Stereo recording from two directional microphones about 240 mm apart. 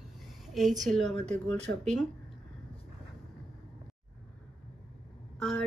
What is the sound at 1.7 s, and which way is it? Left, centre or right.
Speech, right.